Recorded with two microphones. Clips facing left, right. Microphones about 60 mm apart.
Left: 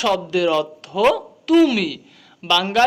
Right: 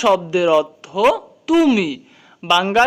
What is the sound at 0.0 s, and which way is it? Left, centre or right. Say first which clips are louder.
Speech: right 4 dB; centre.